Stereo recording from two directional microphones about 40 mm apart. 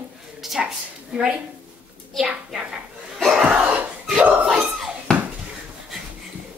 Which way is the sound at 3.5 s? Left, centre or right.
Right.